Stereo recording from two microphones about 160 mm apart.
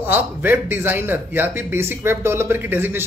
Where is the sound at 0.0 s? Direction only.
15° right (ahead or behind).